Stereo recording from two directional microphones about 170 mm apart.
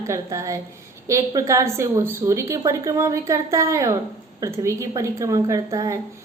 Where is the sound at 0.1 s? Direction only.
20° right (ahead or behind).